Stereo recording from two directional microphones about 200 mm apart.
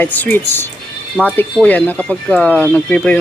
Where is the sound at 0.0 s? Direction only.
10° left (ahead or behind).